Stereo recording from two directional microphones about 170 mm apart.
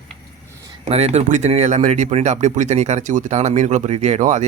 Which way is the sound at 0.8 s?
40° right (ahead or behind).